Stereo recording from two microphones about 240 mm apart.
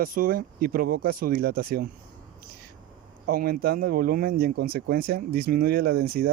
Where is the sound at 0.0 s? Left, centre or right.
Right.